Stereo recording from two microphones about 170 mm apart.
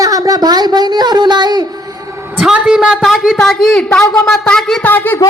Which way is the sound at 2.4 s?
5° right (ahead or behind).